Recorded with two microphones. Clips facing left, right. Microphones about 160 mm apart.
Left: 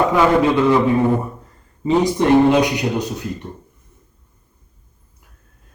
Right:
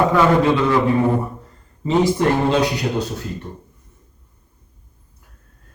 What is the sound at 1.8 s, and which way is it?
A man's voice, 20° left (ahead or behind).